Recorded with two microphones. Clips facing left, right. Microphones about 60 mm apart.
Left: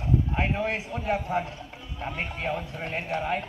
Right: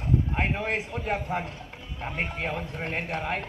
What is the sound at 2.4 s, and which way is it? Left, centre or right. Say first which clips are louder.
Speech: left 1 dB; right.